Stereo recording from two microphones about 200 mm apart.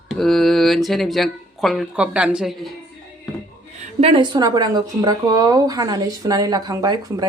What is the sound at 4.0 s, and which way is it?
Speech, 25° right (ahead or behind).